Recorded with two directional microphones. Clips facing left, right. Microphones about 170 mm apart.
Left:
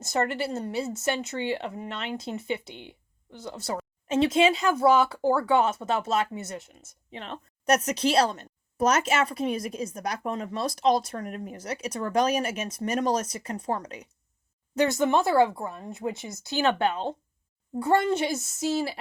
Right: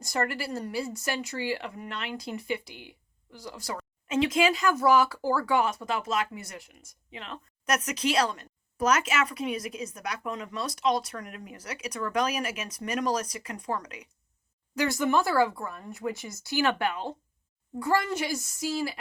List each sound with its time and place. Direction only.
0.0 s speech: 25° left (ahead or behind)